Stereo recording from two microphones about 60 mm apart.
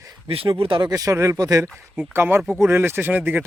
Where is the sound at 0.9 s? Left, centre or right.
Right.